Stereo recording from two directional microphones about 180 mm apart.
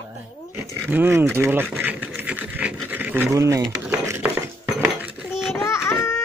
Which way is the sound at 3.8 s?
10° right (ahead or behind).